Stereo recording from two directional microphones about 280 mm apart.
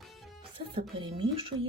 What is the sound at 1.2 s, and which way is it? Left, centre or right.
Speech, centre.